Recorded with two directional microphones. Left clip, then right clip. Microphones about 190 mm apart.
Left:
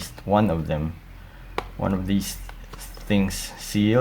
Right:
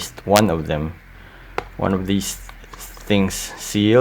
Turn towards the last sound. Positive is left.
turn(degrees=-35)  # may be behind; listen again after turning